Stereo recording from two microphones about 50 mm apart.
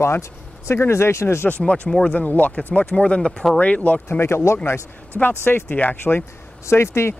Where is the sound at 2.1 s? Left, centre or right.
Left; by 3.4 s centre.